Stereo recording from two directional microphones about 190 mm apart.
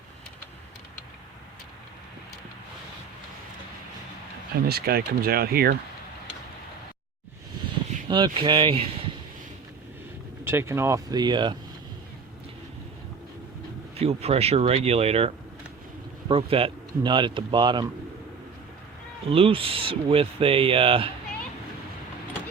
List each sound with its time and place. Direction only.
4.6 s speech: 55° right (ahead or behind)
8.0 s speech: 25° right (ahead or behind)
10.4 s speech: 15° right (ahead or behind)
13.9 s speech: 35° right (ahead or behind)
16.3 s speech: 30° right (ahead or behind)
19.3 s speech: 30° right (ahead or behind)